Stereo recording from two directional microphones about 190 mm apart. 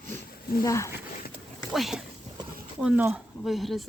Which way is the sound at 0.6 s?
15° left (ahead or behind).